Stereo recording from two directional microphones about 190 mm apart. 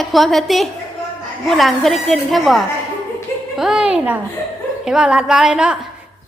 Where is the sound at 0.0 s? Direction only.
Centre (ahead or behind).